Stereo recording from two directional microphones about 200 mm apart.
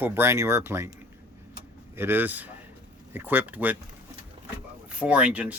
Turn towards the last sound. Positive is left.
turn(degrees=-5)  # may be behind; listen again after turning